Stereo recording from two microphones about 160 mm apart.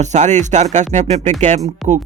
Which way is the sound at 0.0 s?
45° right (ahead or behind).